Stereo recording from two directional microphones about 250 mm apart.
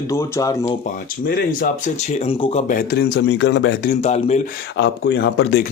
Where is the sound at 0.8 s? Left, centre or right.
Left.